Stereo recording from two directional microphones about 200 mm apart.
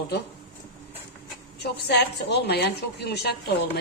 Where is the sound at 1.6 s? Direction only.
55° left (ahead or behind).